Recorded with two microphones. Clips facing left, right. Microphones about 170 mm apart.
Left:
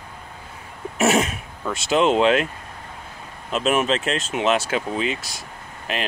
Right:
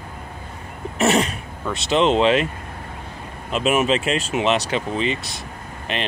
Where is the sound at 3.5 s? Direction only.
Centre (ahead or behind).